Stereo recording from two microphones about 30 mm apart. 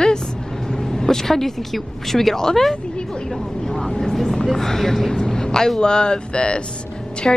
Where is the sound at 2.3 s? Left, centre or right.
Centre.